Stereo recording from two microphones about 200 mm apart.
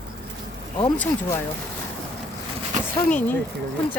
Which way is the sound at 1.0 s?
10° left (ahead or behind).